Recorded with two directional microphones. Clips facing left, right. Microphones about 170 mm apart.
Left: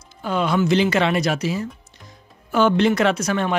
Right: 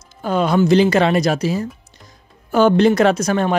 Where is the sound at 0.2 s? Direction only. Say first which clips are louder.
Right 4 dB; 40° right (ahead or behind).